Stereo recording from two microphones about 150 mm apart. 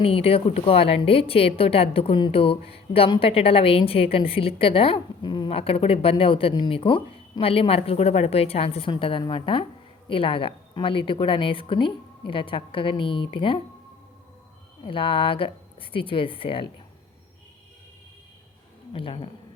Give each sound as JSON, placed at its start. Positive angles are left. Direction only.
{"t": 0.0, "sound": "a woman's voice", "side_deg": 40}
{"t": 14.8, "sound": "a woman's voice", "side_deg": 35}
{"t": 18.9, "sound": "a woman's voice", "side_deg": 40}